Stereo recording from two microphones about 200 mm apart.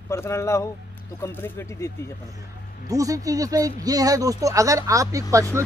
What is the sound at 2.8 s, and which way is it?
Speech, 15° right (ahead or behind).